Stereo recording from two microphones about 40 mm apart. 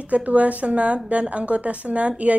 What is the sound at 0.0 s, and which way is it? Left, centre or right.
Speech, right.